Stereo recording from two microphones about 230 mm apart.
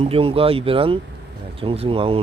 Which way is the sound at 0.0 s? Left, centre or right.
Right.